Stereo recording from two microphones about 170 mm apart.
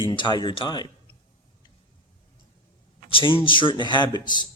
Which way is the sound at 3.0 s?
30° left (ahead or behind).